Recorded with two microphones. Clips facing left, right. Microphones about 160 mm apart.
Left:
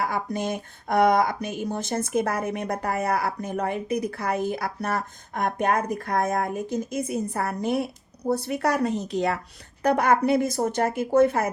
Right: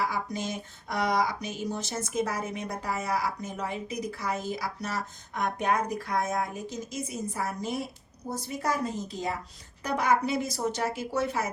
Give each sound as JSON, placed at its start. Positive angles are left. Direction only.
{"t": 0.0, "sound": "a woman's voice", "side_deg": 55}
{"t": 9.8, "sound": "speech", "side_deg": 55}